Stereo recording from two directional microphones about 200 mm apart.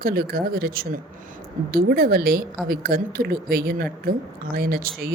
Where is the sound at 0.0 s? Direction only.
50° right (ahead or behind).